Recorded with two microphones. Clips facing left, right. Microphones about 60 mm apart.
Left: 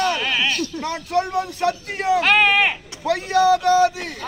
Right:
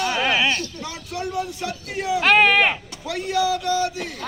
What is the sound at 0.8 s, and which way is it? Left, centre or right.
Speech, left.